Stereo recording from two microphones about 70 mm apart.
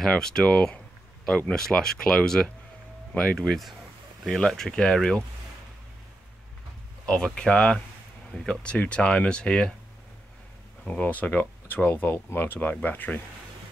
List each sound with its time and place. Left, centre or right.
0.0 s speech: centre
7.3 s speech: centre
10.8 s speech: centre